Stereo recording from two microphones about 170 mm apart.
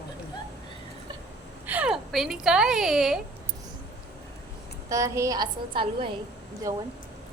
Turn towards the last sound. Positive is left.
turn(degrees=-20)  # may be behind; listen again after turning